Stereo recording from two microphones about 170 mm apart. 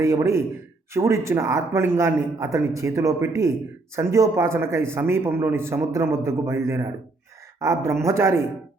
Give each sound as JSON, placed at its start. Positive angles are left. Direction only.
{"t": 0.0, "sound": "a man's voice", "side_deg": -20}